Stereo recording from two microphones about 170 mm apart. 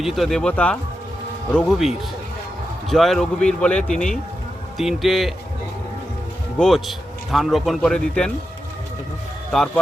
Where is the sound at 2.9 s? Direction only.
Centre (ahead or behind).